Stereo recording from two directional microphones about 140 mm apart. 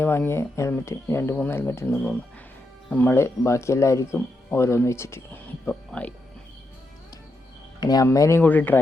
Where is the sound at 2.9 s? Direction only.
15° left (ahead or behind).